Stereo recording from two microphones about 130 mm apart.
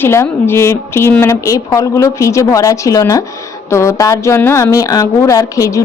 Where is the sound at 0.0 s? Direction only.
20° left (ahead or behind).